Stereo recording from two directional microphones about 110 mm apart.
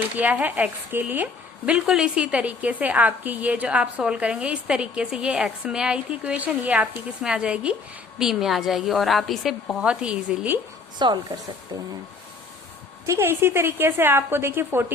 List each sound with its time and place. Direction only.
0.2 s a woman's voice: 15° right (ahead or behind)
10.9 s speech: 40° right (ahead or behind)
13.1 s a woman's voice: 25° right (ahead or behind)